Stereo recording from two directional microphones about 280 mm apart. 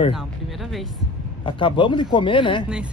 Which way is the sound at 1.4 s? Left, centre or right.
Centre.